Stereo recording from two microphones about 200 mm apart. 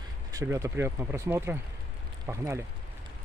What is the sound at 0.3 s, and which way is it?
Speech, 15° right (ahead or behind).